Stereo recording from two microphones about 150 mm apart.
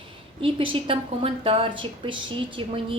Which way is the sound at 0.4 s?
35° right (ahead or behind).